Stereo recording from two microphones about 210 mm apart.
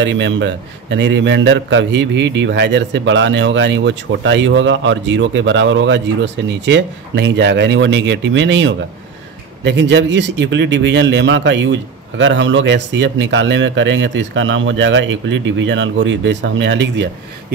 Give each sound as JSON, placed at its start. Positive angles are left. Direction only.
{"t": 0.0, "sound": "a man's voice", "side_deg": -60}